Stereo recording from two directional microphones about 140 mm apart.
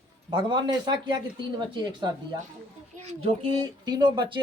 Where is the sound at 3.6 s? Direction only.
30° right (ahead or behind).